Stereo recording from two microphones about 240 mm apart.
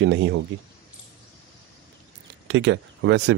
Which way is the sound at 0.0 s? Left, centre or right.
Right.